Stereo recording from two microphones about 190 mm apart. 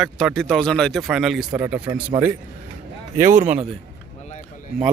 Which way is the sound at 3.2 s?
40° right (ahead or behind).